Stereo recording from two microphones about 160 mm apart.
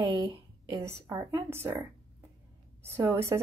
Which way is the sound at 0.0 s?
25° right (ahead or behind).